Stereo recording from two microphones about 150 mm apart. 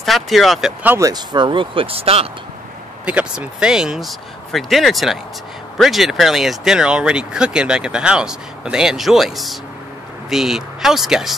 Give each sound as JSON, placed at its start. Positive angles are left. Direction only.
{"t": 0.0, "sound": "speech", "side_deg": 0}
{"t": 0.9, "sound": "speech", "side_deg": -25}
{"t": 3.1, "sound": "speech", "side_deg": -5}